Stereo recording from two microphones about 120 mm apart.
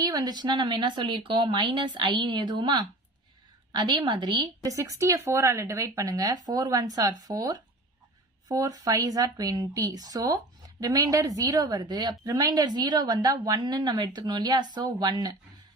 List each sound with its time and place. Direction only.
0.0 s speech: 35° right (ahead or behind)
4.8 s speech: 25° right (ahead or behind)